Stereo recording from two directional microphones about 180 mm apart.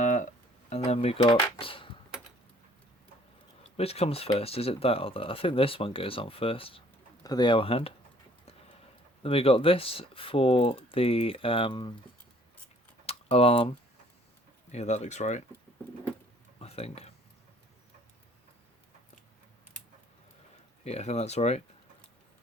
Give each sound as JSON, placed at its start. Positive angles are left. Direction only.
{"t": 0.0, "sound": "a sound", "side_deg": 45}
{"t": 0.9, "sound": "speech", "side_deg": 30}
{"t": 3.8, "sound": "speech", "side_deg": 35}
{"t": 9.2, "sound": "speech", "side_deg": 30}
{"t": 13.1, "sound": "typing", "side_deg": 35}
{"t": 14.7, "sound": "speech", "side_deg": 40}
{"t": 16.6, "sound": "a sound", "side_deg": 35}
{"t": 20.8, "sound": "speech", "side_deg": 35}